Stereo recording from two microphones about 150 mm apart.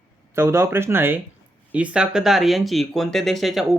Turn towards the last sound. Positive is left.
turn(degrees=0)  # may be behind; listen again after turning